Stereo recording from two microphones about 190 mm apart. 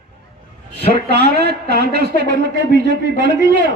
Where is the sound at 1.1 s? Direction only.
55° right (ahead or behind).